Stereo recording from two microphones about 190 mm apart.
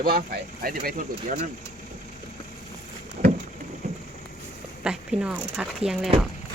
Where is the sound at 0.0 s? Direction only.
50° right (ahead or behind).